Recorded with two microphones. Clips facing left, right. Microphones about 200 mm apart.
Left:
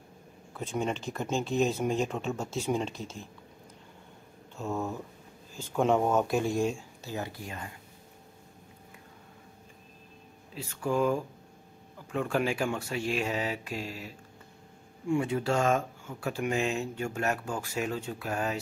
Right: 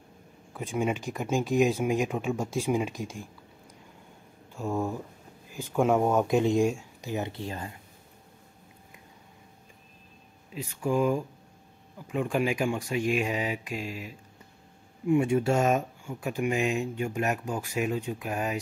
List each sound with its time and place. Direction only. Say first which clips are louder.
0.5 s speech: right 3 dB; 10° right (ahead or behind)
4.6 s speech: right 3 dB; 10° right (ahead or behind); by 7.7 s 30° right (ahead or behind)
10.7 s speech: right 2 dB; 10° right (ahead or behind)
13.8 s speech: right 3 dB; 40° left (ahead or behind)
15.0 s speech: right 4 dB; 25° right (ahead or behind)